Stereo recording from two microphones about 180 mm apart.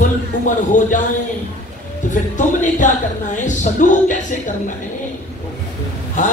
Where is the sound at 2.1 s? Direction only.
45° left (ahead or behind).